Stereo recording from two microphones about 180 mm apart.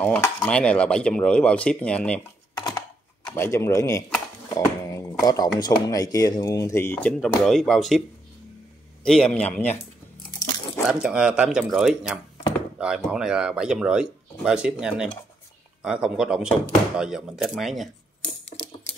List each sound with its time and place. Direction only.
0.0 s speech: 5° left (ahead or behind)
3.3 s speech: 15° left (ahead or behind)
9.0 s speech: 5° left (ahead or behind)
10.9 s speech: 5° right (ahead or behind)